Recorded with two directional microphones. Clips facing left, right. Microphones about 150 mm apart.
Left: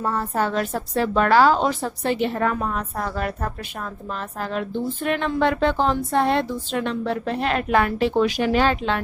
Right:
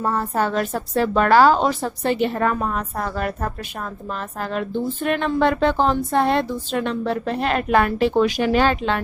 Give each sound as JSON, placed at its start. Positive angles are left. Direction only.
{"t": 0.0, "sound": "a woman's voice", "side_deg": -45}